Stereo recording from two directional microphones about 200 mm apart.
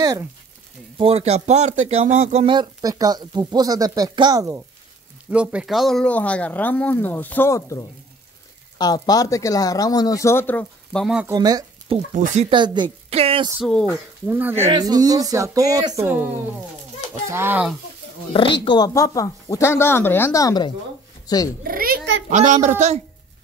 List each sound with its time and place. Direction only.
0.0 s a sound: 15° right (ahead or behind)
0.9 s speech: 30° right (ahead or behind)
5.3 s speech: 5° right (ahead or behind)
11.2 s speech: 20° right (ahead or behind)
12.1 s a child's voice: 40° right (ahead or behind)
12.4 s speech: 25° right (ahead or behind)
13.6 s speech: 5° left (ahead or behind)
14.2 s speech: 10° right (ahead or behind)
18.3 s speech: 25° left (ahead or behind)
21.6 s a child's voice: 45° right (ahead or behind)